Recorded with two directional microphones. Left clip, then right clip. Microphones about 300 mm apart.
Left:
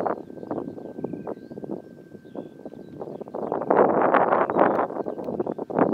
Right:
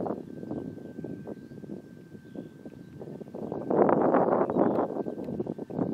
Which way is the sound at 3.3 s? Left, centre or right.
Centre.